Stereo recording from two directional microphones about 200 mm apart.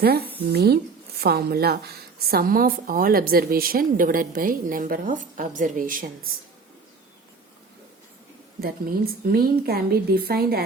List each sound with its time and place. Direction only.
0.0 s a woman's voice: 50° right (ahead or behind)
8.6 s a woman's voice: 50° right (ahead or behind)